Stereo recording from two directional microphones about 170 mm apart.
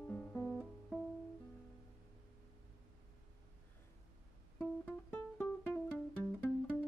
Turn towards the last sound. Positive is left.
turn(degrees=10)  # may be behind; listen again after turning